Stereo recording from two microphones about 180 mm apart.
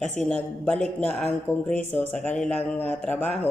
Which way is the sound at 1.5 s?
10° right (ahead or behind).